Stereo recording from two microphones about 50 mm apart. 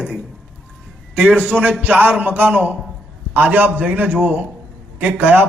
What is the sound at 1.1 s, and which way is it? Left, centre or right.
A man's voice, right.